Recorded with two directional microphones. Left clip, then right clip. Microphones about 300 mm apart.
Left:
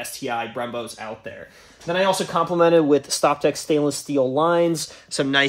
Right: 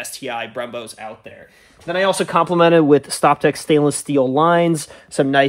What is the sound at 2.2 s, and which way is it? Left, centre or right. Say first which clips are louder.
Speech: right 4 dB; right.